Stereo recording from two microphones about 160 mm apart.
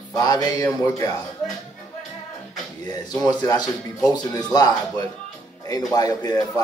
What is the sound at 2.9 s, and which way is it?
A man's voice, 25° left (ahead or behind).